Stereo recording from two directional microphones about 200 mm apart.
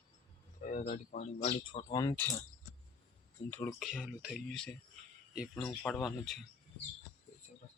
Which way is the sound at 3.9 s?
5° right (ahead or behind).